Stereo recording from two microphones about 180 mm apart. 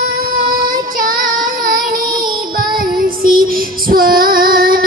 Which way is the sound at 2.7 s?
55° right (ahead or behind).